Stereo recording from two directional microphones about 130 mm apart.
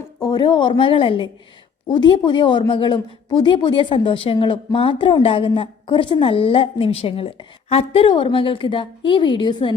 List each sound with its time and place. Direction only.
0.2 s speech: 35° left (ahead or behind)